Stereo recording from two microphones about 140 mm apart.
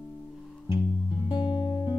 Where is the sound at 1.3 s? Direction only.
40° left (ahead or behind).